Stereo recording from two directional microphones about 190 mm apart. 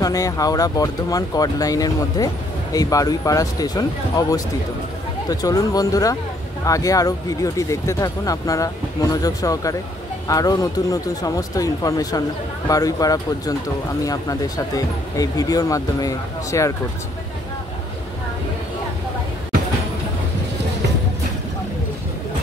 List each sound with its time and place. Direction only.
0.0 s speech: 20° left (ahead or behind)
14.8 s speech: 20° left (ahead or behind)